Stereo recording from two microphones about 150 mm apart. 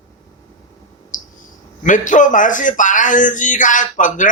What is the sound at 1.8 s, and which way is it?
Speech, 60° left (ahead or behind).